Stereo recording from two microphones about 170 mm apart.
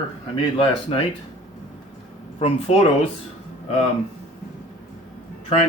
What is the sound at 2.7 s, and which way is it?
Speech, 40° left (ahead or behind).